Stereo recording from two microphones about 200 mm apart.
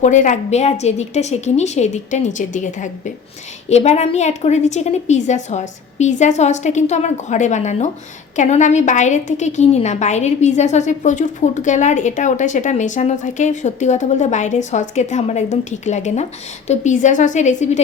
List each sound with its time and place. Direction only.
0.0 s a woman's voice: 40° left (ahead or behind)